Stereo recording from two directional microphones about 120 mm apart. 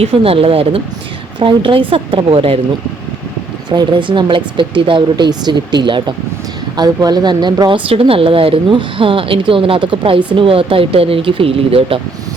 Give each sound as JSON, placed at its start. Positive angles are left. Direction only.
{"t": 0.0, "sound": "speech", "side_deg": -50}
{"t": 3.7, "sound": "speech", "side_deg": -45}